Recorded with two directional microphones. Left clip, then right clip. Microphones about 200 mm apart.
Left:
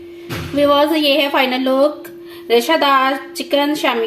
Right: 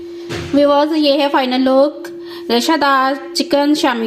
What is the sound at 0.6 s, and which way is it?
A woman's voice, 30° right (ahead or behind).